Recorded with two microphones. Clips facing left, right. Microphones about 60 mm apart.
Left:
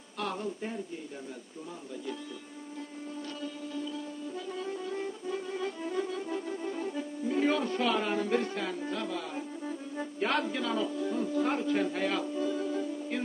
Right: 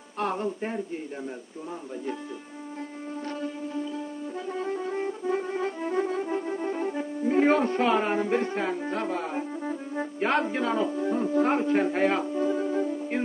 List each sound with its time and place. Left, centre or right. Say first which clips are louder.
0.2 s speech: right 6 dB; right
3.4 s music: right 5 dB; right